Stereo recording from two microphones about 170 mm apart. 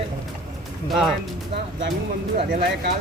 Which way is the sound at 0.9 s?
Centre (ahead or behind).